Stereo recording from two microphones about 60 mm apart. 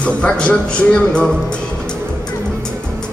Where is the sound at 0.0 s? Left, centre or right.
Centre.